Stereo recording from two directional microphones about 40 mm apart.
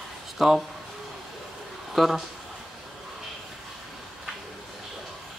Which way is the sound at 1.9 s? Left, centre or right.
Centre.